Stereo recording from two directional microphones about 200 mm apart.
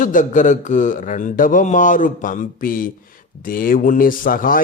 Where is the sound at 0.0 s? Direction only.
40° left (ahead or behind).